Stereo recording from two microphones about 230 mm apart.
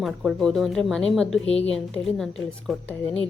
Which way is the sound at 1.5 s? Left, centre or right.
Left.